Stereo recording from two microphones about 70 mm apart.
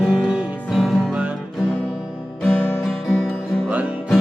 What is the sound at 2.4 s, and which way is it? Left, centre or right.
Guitar, centre.